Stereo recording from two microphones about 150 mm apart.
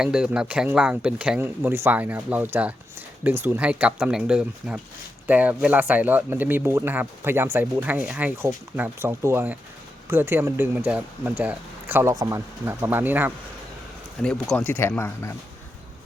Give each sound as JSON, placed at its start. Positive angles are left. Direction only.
{"t": 0.0, "sound": "speech", "side_deg": -5}
{"t": 14.2, "sound": "speech", "side_deg": 5}